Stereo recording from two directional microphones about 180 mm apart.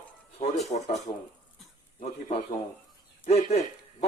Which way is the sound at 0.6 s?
40° left (ahead or behind).